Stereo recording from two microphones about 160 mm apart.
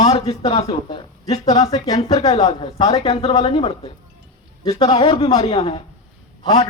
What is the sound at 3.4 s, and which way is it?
A man's voice, 35° left (ahead or behind).